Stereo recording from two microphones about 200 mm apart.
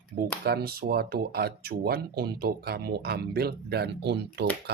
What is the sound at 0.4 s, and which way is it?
Speech, 50° right (ahead or behind).